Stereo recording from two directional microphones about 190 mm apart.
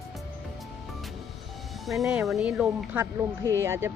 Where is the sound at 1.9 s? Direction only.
Centre (ahead or behind).